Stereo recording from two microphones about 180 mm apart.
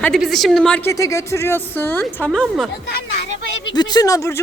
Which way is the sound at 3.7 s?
25° left (ahead or behind).